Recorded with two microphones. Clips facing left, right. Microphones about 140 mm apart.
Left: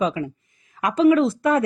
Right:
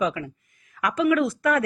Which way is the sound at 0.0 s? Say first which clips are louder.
Left 3 dB; 25° left (ahead or behind).